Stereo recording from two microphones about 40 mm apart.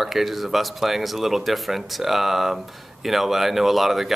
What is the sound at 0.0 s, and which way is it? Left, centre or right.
Speech, centre.